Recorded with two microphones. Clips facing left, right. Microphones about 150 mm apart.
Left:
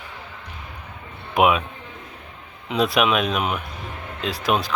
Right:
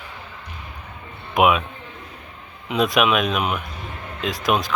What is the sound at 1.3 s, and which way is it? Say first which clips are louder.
Speech: right 1 dB; 30° left (ahead or behind).